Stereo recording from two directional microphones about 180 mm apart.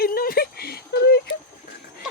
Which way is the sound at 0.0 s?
55° left (ahead or behind).